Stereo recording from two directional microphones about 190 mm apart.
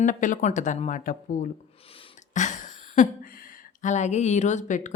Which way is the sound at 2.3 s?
40° left (ahead or behind).